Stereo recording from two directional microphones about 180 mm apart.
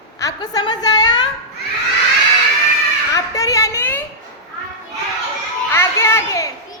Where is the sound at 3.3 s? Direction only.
15° left (ahead or behind).